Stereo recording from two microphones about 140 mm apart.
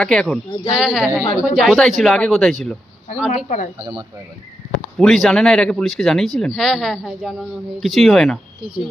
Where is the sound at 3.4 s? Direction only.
60° left (ahead or behind).